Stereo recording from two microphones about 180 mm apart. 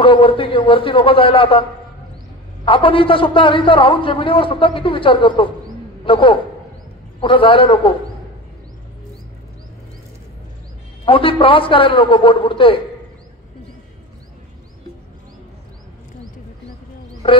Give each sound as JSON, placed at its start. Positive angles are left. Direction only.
{"t": 0.0, "sound": "a man's voice", "side_deg": 30}
{"t": 2.6, "sound": "a man's voice", "side_deg": 30}
{"t": 11.1, "sound": "a man's voice", "side_deg": 30}
{"t": 17.2, "sound": "a man's voice", "side_deg": 30}